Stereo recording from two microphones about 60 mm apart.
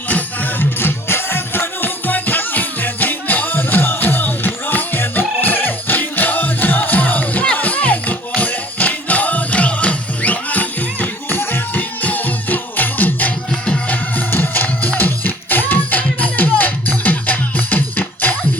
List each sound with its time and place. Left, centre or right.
0.1 s music: left